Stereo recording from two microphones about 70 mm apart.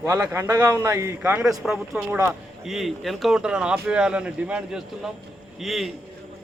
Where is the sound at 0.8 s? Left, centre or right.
Right.